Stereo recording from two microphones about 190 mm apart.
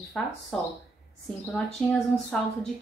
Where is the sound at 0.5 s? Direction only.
5° left (ahead or behind).